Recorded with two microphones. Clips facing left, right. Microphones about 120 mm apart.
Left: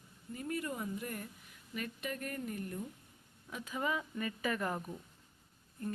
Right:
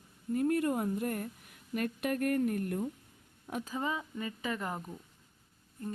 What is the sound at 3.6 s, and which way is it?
Speech, 30° right (ahead or behind).